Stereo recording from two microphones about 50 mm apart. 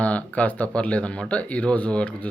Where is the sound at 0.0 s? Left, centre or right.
Left.